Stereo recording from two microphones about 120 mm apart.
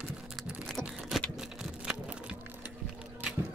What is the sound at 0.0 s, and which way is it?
Typing, 10° right (ahead or behind).